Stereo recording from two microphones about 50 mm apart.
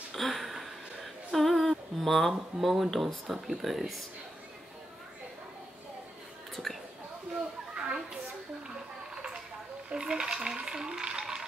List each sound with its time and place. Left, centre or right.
0.1 s a sound: centre
2.6 s speech: centre
6.5 s whispering: centre
7.3 s children playing: centre
9.1 s a sound: centre
9.8 s speech: centre